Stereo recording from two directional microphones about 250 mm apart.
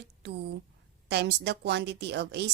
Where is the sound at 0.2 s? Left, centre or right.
Right.